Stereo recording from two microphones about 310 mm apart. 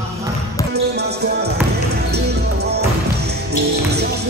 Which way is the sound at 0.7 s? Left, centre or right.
Right.